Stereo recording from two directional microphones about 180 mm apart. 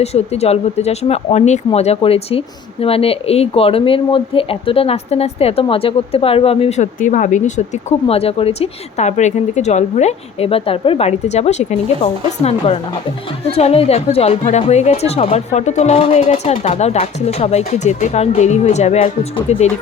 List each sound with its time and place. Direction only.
0.0 s speech: 35° left (ahead or behind)